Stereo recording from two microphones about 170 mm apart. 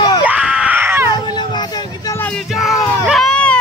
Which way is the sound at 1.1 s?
25° left (ahead or behind).